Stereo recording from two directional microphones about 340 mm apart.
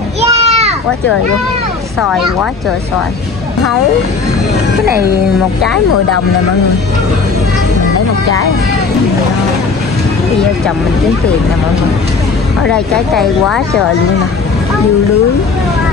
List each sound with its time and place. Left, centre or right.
0.2 s children playing: centre
12.6 s speech: centre